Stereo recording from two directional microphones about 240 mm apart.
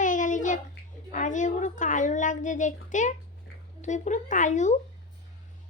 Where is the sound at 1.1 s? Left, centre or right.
Left.